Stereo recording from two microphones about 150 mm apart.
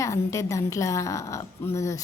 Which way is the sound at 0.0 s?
20° left (ahead or behind).